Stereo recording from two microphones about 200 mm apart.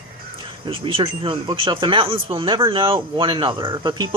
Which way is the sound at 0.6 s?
25° right (ahead or behind).